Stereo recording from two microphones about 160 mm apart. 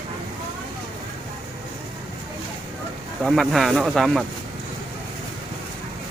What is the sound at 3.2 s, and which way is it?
Speech, centre (ahead or behind).